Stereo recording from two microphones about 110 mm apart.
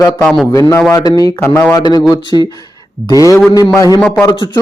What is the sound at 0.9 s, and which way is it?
Speech, 30° left (ahead or behind).